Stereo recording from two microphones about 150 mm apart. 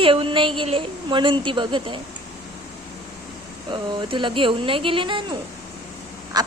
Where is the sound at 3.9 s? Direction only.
30° right (ahead or behind).